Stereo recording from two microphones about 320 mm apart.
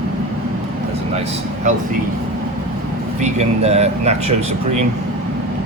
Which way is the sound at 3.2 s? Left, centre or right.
Centre.